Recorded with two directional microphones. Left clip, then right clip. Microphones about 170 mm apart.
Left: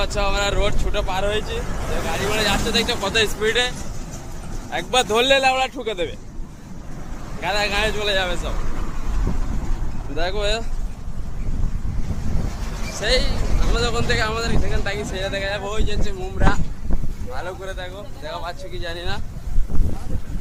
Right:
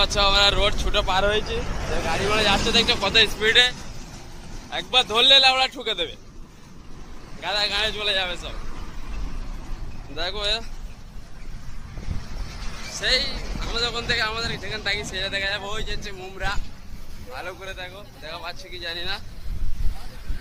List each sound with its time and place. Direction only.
0.0 s speech: 5° left (ahead or behind)
1.0 s speech: 20° right (ahead or behind)
2.8 s speech: 15° left (ahead or behind); by 6.1 s centre (ahead or behind)
7.4 s speech: 5° right (ahead or behind)
10.2 s speech: centre (ahead or behind)
12.9 s speech: centre (ahead or behind)